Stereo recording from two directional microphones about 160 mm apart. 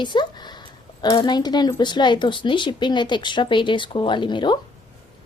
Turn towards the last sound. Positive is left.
turn(degrees=30)  # may be behind; listen again after turning